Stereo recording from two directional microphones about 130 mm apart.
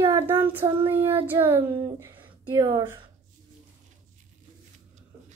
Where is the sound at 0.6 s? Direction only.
45° right (ahead or behind).